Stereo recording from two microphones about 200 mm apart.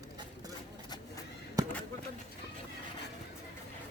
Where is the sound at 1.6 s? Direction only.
15° right (ahead or behind).